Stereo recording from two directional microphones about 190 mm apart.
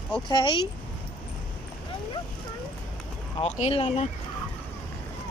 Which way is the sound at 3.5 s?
30° left (ahead or behind).